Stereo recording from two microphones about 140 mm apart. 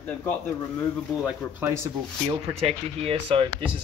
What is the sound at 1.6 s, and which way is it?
Speech, 20° right (ahead or behind).